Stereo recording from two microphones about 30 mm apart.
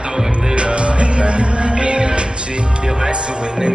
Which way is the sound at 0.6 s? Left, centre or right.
Right.